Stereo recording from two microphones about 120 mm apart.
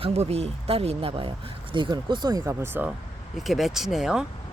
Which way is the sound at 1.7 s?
40° right (ahead or behind).